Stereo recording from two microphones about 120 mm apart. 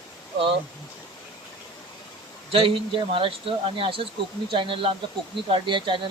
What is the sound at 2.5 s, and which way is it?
Speech, 45° right (ahead or behind).